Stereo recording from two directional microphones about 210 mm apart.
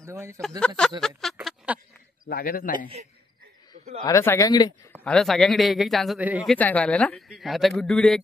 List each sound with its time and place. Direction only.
0.0 s speech: 15° right (ahead or behind)
0.6 s speech: 5° left (ahead or behind)
1.3 s a sound: 5° right (ahead or behind)
2.2 s a man's voice: 45° left (ahead or behind)
4.0 s speech: 15° left (ahead or behind)
5.0 s speech: centre (ahead or behind)
6.5 s speech: 5° left (ahead or behind)